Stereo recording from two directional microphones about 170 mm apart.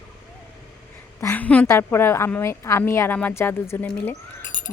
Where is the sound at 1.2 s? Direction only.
10° left (ahead or behind).